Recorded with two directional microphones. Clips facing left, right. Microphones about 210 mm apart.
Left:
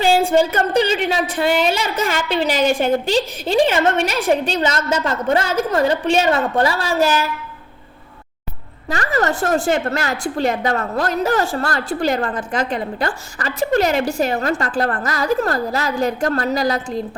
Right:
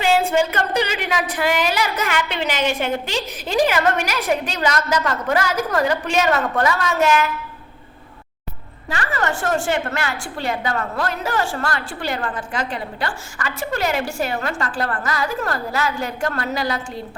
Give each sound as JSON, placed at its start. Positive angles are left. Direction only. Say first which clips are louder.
{"t": 0.0, "sound": "a woman's voice", "louder": "left 3 dB", "side_deg": 30}
{"t": 8.9, "sound": "a woman's voice", "louder": "left 4 dB", "side_deg": 40}